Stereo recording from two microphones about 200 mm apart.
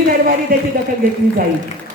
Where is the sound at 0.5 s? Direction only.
45° right (ahead or behind).